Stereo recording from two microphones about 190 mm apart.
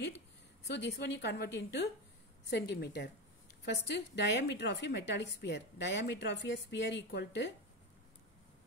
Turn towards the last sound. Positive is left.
turn(degrees=65)  # may be behind; listen again after turning